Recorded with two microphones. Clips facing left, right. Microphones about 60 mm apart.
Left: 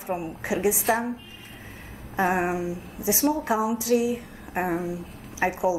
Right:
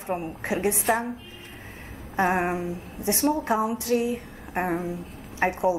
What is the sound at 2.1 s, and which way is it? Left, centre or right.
A woman's voice, centre.